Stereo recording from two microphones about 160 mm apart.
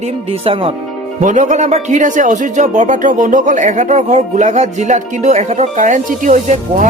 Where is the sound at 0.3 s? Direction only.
35° right (ahead or behind).